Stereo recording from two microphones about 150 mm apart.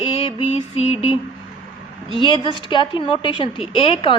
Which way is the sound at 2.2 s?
35° left (ahead or behind).